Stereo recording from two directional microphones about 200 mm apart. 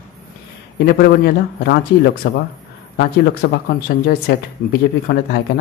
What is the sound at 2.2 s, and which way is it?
Speech, 55° left (ahead or behind).